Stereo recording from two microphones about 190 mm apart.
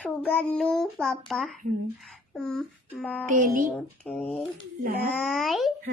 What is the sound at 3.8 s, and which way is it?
A child's voice, 5° left (ahead or behind).